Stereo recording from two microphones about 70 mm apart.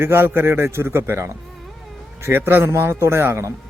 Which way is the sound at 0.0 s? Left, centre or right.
Right.